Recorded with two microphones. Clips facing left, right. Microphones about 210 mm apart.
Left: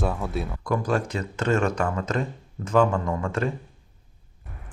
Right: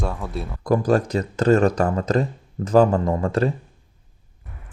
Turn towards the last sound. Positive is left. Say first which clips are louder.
# right 6 dB
turn(degrees=-35)  # may be behind; listen again after turning